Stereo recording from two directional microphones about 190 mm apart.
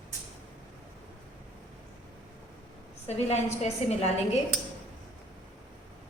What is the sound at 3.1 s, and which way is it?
A woman's voice, 35° left (ahead or behind).